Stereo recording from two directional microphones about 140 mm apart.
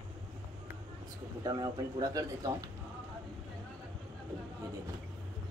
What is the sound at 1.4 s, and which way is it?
Speech, 25° right (ahead or behind).